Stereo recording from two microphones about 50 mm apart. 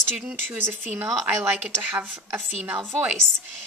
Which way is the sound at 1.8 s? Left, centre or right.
Right.